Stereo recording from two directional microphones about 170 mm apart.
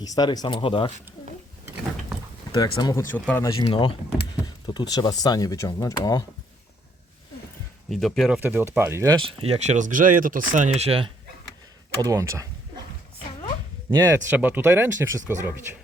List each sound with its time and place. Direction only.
0.0 s speech: 25° left (ahead or behind)
2.5 s speech: 25° left (ahead or behind)
3.1 s speech: 10° left (ahead or behind)
7.9 s speech: centre (ahead or behind)
8.4 s speech: 10° right (ahead or behind)
9.2 s speech: 35° right (ahead or behind)
11.9 s speech: 20° right (ahead or behind)
14.0 s speech: 15° right (ahead or behind)